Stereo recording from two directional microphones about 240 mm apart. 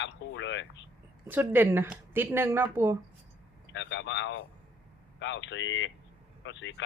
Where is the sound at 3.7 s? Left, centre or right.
Left.